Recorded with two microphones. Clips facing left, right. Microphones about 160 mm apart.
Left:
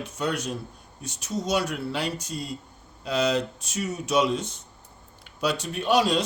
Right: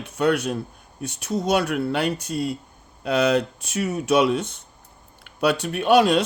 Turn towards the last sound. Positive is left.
turn(degrees=-60)  # may be behind; listen again after turning